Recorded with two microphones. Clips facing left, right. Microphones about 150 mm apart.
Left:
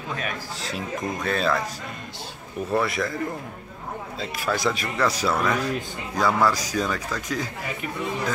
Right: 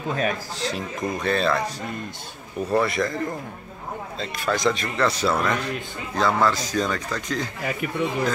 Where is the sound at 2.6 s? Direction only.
Centre (ahead or behind).